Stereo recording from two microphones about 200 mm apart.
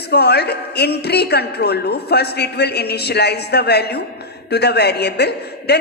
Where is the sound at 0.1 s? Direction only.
55° left (ahead or behind).